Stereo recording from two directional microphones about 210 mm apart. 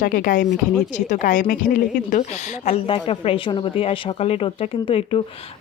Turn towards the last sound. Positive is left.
turn(degrees=25)  # may be behind; listen again after turning